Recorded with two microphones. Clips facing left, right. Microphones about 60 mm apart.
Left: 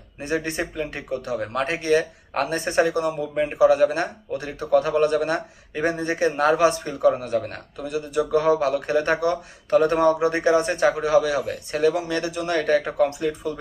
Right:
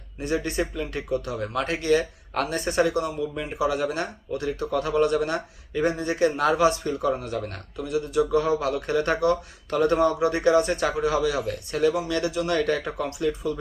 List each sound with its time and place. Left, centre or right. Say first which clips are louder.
0.2 s speech: even; left